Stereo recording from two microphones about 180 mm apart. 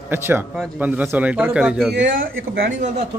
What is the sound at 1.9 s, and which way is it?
Speech, 80° right.